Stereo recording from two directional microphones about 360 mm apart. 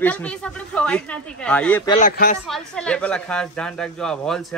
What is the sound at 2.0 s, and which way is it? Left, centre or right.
Speech, left.